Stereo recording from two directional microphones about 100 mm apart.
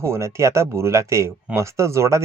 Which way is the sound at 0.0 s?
30° right (ahead or behind).